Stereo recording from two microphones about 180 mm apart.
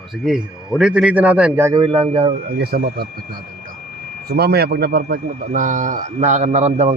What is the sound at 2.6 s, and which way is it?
Speech, 55° right (ahead or behind).